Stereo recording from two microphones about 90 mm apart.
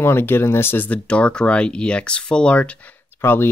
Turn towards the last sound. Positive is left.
turn(degrees=25)  # may be behind; listen again after turning